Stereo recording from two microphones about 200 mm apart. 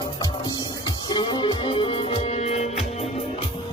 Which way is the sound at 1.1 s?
25° left (ahead or behind).